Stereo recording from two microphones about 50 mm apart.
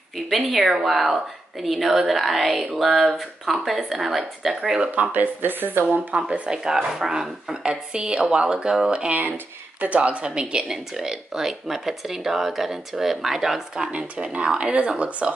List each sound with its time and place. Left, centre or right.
0.5 s speech: centre
5.1 s speech: right
6.3 s speech: centre
9.8 s speech: right; by 13.8 s centre
13.9 s speech: right